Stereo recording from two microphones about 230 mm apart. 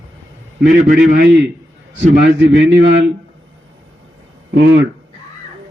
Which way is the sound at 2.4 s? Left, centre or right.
Right.